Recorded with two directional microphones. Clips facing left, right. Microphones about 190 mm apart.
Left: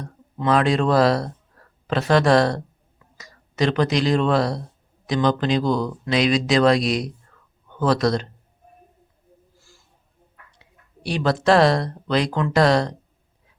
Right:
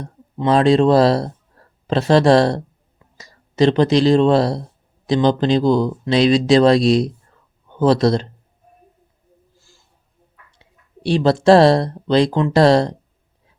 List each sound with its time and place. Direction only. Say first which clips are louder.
0.0 s speech: right 4 dB; 30° right (ahead or behind)
10.6 s speech: right 7 dB; 30° right (ahead or behind)